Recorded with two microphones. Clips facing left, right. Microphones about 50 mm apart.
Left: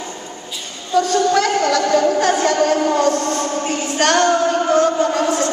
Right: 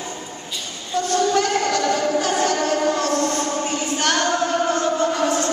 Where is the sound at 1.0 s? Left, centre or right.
Left.